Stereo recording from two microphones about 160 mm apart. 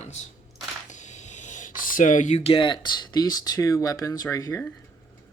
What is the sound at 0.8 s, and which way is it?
Speech, 50° left (ahead or behind).